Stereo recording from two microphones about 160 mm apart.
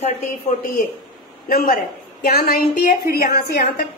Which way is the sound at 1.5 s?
65° left (ahead or behind).